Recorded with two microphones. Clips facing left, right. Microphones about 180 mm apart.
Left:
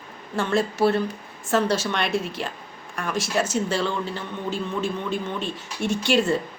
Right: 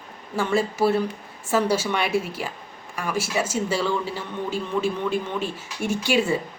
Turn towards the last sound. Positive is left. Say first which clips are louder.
# left 1 dB
turn(degrees=-10)  # may be behind; listen again after turning